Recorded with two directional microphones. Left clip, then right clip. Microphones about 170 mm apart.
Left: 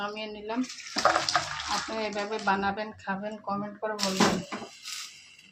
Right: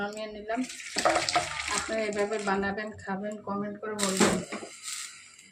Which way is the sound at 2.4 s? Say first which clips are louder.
Left 2 dB; 40° left (ahead or behind).